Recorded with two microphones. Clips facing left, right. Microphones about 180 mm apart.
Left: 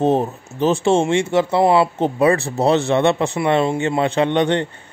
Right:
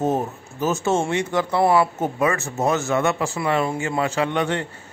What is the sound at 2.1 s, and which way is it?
Speech, 35° left (ahead or behind).